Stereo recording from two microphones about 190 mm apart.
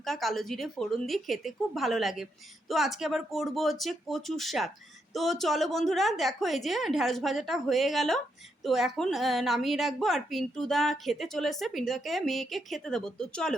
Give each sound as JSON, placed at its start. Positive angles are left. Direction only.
{"t": 0.0, "sound": "a woman's voice", "side_deg": 0}